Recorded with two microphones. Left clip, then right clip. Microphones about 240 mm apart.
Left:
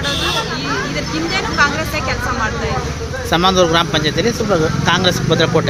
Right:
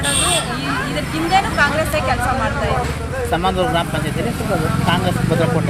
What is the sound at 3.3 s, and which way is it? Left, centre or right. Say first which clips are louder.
Speech: left 6 dB; left.